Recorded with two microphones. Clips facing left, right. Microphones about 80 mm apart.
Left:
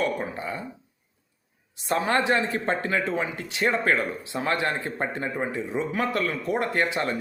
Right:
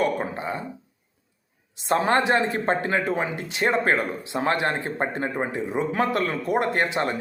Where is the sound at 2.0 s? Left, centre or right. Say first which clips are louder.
Right 2 dB; right.